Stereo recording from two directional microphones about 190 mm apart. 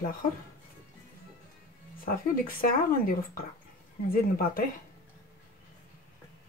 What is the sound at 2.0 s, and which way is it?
Speech, 50° left (ahead or behind).